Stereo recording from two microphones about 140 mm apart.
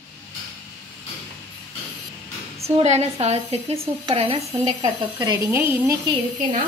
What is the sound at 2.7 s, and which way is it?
A woman's voice, 50° right (ahead or behind).